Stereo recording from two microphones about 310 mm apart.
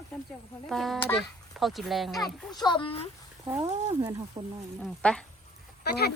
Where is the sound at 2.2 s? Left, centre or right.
Centre.